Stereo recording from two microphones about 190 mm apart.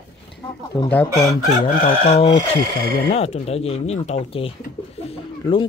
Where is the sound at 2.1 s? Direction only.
30° left (ahead or behind).